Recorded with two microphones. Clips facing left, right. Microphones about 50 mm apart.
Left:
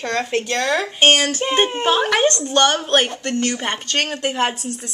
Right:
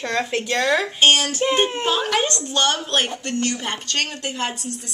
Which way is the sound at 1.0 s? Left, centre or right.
Left.